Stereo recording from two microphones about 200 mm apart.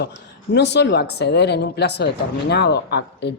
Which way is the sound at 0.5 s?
60° left (ahead or behind).